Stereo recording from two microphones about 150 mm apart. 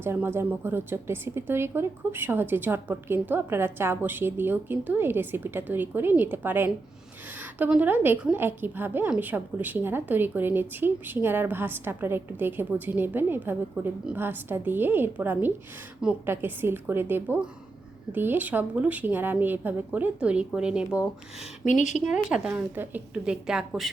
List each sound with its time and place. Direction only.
0.0 s a woman's voice: 15° right (ahead or behind)
21.6 s speech: 55° left (ahead or behind)
22.0 s a woman's voice: 5° right (ahead or behind)